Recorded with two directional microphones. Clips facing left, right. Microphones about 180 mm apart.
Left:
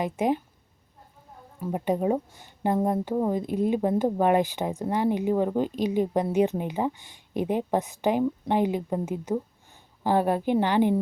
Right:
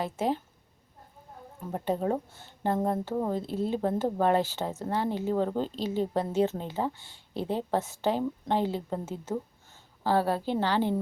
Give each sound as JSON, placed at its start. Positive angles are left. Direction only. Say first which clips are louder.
{"t": 0.0, "sound": "speech", "louder": "left 4 dB", "side_deg": 15}
{"t": 1.6, "sound": "speech", "louder": "left 4 dB", "side_deg": 10}